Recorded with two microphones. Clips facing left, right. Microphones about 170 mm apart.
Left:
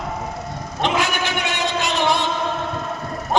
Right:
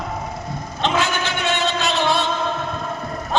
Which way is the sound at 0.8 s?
15° left (ahead or behind).